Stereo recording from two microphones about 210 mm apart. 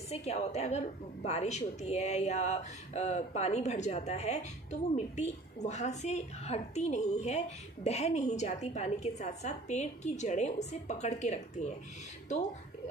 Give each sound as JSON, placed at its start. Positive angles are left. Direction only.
{"t": 0.1, "sound": "speech", "side_deg": 30}